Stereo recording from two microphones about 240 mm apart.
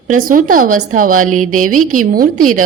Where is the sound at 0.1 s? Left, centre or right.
Right.